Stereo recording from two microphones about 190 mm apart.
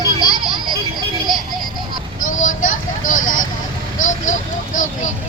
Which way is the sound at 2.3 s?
40° left (ahead or behind).